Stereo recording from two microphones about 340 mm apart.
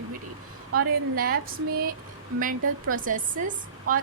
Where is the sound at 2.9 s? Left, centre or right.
Right.